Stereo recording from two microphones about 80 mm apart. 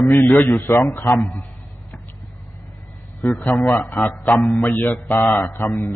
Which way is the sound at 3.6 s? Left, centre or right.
Centre.